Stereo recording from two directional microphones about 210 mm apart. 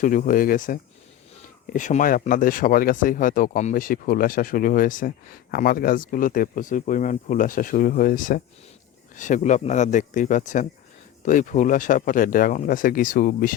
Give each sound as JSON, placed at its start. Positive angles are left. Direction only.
{"t": 0.0, "sound": "speech", "side_deg": 40}